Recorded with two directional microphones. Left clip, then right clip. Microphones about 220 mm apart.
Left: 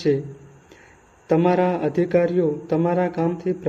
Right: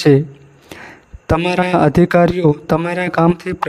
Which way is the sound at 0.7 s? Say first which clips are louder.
Right 13 dB; 50° right (ahead or behind).